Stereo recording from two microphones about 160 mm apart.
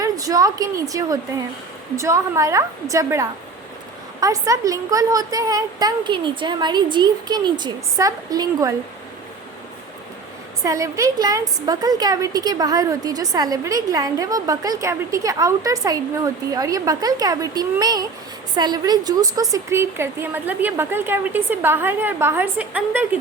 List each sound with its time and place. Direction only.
0.0 s a woman's voice: 20° right (ahead or behind)
10.6 s a woman's voice: 20° right (ahead or behind)